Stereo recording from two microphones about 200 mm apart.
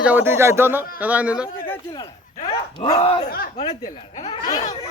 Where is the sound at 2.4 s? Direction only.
30° left (ahead or behind).